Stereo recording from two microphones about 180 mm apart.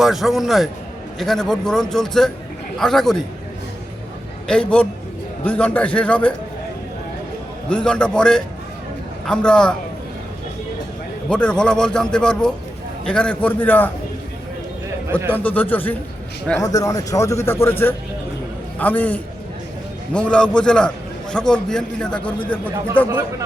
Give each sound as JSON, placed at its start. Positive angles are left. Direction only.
{"t": 0.0, "sound": "a man's voice", "side_deg": 0}
{"t": 4.4, "sound": "a man's voice", "side_deg": 5}
{"t": 7.7, "sound": "a man's voice", "side_deg": 5}
{"t": 11.3, "sound": "a man's voice", "side_deg": 5}
{"t": 15.3, "sound": "a man's voice", "side_deg": 10}